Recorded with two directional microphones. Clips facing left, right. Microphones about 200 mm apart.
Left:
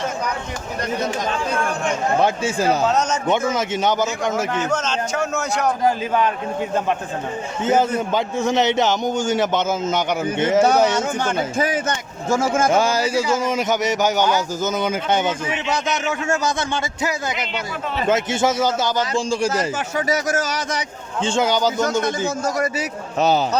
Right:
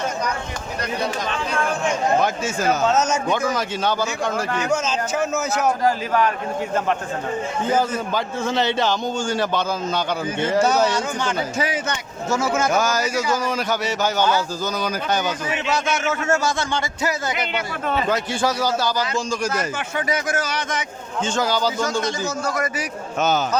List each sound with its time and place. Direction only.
2.2 s a man's voice: 30° left (ahead or behind)
2.8 s a man's voice: 5° right (ahead or behind)
3.2 s a man's voice: 25° left (ahead or behind)
4.6 s a man's voice: 10° right (ahead or behind)
5.8 s a man's voice: 20° left (ahead or behind)
7.6 s a man's voice: 20° left (ahead or behind)
11.5 s a man's voice: 50° left (ahead or behind)
12.7 s a man's voice: 30° left (ahead or behind)
21.2 s a man's voice: 25° left (ahead or behind)
22.4 s a man's voice: 35° left (ahead or behind)